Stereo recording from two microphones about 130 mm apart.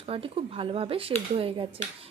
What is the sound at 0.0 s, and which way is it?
Speech, 45° right (ahead or behind).